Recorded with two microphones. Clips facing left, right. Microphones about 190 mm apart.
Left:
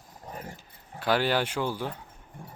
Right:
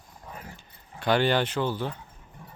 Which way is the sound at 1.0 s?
5° left (ahead or behind).